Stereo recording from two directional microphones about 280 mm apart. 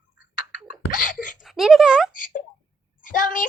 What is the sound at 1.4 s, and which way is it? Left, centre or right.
Speech, centre.